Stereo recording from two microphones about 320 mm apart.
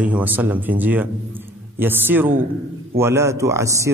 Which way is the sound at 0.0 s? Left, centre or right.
Centre.